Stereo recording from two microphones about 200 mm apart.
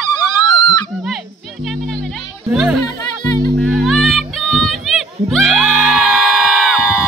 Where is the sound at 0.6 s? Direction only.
20° left (ahead or behind).